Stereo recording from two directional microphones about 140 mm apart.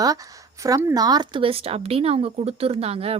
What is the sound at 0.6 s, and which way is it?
A woman's voice, 20° right (ahead or behind).